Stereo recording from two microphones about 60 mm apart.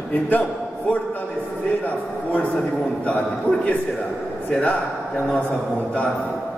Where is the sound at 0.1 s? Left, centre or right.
Left.